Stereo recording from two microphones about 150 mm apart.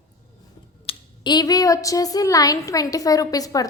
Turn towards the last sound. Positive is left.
turn(degrees=25)  # may be behind; listen again after turning